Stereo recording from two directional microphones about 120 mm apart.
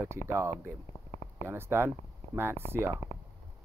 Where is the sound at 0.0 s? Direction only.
25° right (ahead or behind).